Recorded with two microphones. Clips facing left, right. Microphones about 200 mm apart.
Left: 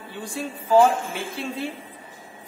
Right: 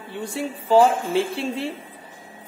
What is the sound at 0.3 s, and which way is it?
Speech, 30° right (ahead or behind).